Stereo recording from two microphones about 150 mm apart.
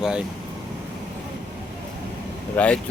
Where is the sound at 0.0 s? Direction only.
5° right (ahead or behind).